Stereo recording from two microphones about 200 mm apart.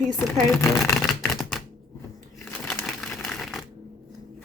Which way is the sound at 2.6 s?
5° left (ahead or behind).